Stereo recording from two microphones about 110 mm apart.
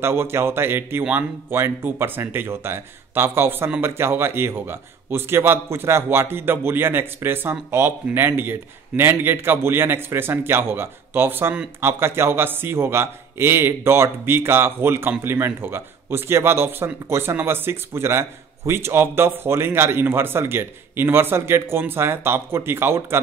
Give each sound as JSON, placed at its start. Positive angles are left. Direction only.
{"t": 0.0, "sound": "a man's voice", "side_deg": -20}